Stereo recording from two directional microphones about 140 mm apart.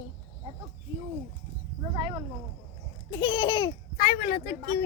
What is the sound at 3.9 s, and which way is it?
Speech, 75° left (ahead or behind).